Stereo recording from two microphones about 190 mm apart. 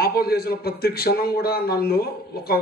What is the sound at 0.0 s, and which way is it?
A man's voice, 55° left (ahead or behind).